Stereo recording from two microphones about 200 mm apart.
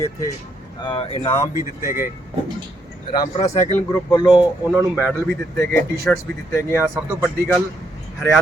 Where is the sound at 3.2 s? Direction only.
20° left (ahead or behind).